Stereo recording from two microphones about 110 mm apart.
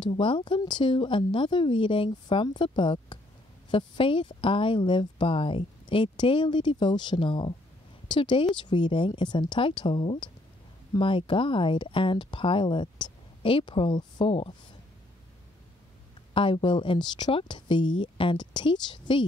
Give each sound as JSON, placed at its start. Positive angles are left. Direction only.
{"t": 0.0, "sound": "speech", "side_deg": 50}
{"t": 16.3, "sound": "speech", "side_deg": 50}